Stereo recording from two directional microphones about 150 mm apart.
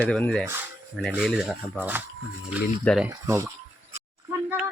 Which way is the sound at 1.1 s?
5° right (ahead or behind).